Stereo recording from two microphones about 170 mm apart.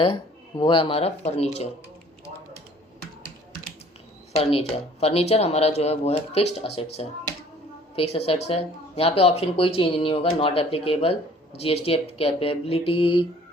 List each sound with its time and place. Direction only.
0.0 s speech: 25° left (ahead or behind)
4.3 s speech: 35° left (ahead or behind)